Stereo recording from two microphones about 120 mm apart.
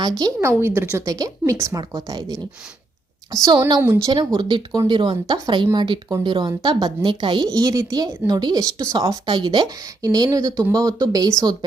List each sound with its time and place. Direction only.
0.0 s speech: 35° right (ahead or behind)
0.6 s speech: 15° right (ahead or behind)
1.0 s speech: 30° right (ahead or behind)
4.4 s speech: 35° right (ahead or behind)
6.1 s speech: 30° right (ahead or behind)